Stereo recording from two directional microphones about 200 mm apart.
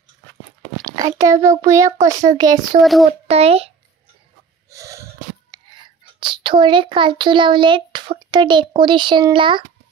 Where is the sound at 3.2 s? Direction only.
30° right (ahead or behind).